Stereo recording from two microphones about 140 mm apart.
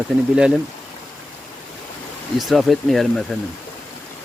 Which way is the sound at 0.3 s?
5° right (ahead or behind).